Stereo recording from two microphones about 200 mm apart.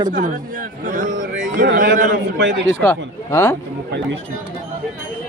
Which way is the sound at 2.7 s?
10° left (ahead or behind).